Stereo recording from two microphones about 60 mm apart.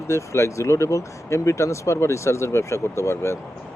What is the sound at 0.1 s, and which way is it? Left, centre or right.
Speech, left.